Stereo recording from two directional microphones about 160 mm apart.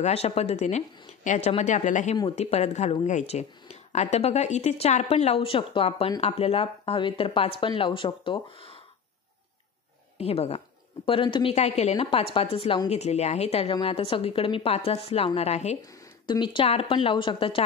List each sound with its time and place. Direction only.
0.0 s speech: 40° left (ahead or behind)
2.1 s a woman's voice: 35° left (ahead or behind)
10.1 s a woman's voice: 40° left (ahead or behind)
15.8 s a woman's voice: 25° left (ahead or behind)